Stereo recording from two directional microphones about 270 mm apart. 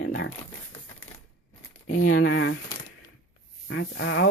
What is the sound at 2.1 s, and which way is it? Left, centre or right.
Speech, left.